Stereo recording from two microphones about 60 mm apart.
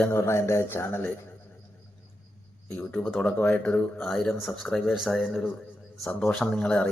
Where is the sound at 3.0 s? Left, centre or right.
Left.